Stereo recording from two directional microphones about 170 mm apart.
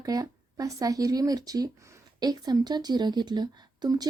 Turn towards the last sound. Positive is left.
turn(degrees=-25)  # may be behind; listen again after turning